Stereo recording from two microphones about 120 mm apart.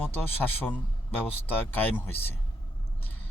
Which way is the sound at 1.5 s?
15° left (ahead or behind).